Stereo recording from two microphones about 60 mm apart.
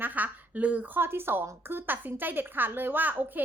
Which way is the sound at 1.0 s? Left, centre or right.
Right.